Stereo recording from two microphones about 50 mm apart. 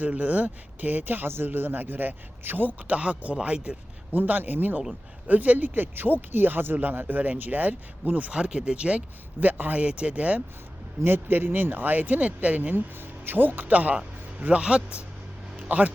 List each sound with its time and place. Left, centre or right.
0.1 s speech: right
4.1 s speech: right
8.3 s speech: centre
9.4 s speech: right
9.8 s speech: right
11.0 s speech: right
12.7 s speech: right
14.4 s speech: right
15.7 s speech: right